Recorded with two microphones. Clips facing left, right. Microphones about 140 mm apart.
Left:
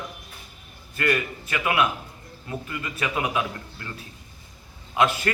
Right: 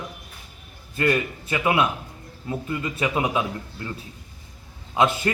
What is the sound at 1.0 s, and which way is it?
A man's voice, 25° right (ahead or behind).